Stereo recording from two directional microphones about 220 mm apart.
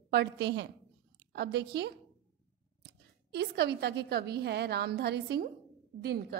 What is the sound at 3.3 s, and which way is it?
A woman's voice, 50° right (ahead or behind).